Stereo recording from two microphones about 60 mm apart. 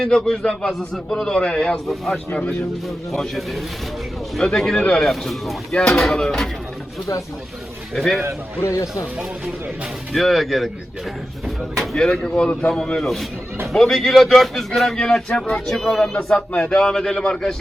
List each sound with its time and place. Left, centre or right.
0.0 s a man's voice: centre
3.1 s a man's voice: centre
7.9 s speech: centre
8.6 s speech: left
10.2 s a man's voice: centre